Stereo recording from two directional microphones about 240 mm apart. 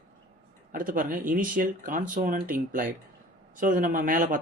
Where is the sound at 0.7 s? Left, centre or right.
Right.